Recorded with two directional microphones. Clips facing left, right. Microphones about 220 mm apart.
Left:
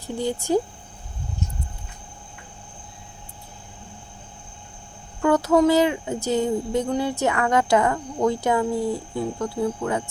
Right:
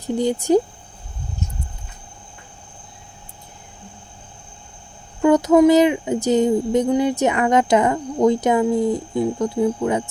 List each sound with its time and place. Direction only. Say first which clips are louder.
0.0 s speech: right 6 dB; 15° right (ahead or behind)
5.2 s speech: right 5 dB; 15° right (ahead or behind)